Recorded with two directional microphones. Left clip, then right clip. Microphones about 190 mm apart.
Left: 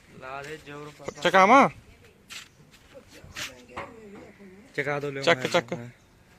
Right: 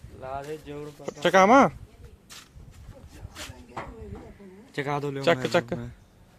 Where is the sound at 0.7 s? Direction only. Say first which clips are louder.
Right 3 dB; 50° right (ahead or behind).